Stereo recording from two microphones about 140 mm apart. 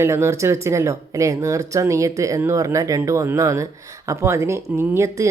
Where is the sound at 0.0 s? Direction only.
20° right (ahead or behind).